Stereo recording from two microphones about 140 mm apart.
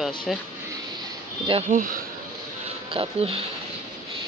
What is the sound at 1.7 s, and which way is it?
Speech, 80° right.